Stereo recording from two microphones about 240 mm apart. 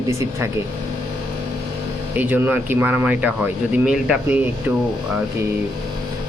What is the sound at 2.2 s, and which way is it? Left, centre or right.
Speech, centre.